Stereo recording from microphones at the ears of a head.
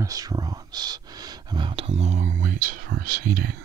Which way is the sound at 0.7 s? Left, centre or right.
Right.